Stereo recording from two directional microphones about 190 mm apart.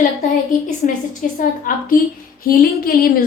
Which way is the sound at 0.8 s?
40° left (ahead or behind).